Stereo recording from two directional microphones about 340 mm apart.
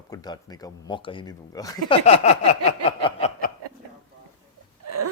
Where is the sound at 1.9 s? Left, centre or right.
Centre.